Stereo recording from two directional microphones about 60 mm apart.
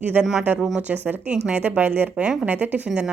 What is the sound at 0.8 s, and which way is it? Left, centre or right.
Speech, right.